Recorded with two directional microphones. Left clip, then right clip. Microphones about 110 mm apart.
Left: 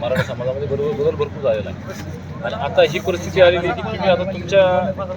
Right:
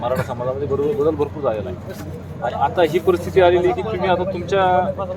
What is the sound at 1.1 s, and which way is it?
Speech, 50° right (ahead or behind).